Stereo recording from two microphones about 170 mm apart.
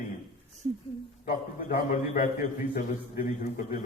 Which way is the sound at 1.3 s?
55° left (ahead or behind).